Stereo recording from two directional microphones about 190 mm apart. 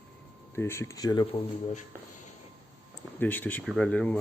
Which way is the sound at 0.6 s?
15° left (ahead or behind).